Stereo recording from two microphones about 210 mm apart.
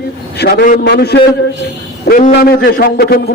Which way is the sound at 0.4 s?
45° left (ahead or behind).